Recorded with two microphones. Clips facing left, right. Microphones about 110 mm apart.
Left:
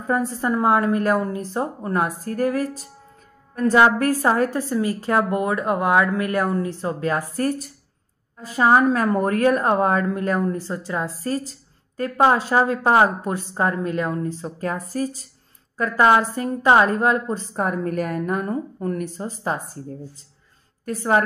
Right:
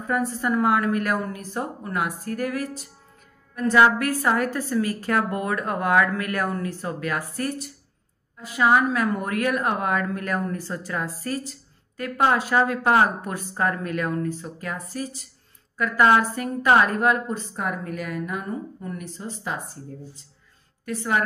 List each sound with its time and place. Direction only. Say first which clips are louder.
0.0 s a woman's voice: left 2 dB; 30° left (ahead or behind)
20.8 s a woman's voice: left 5 dB; 40° left (ahead or behind)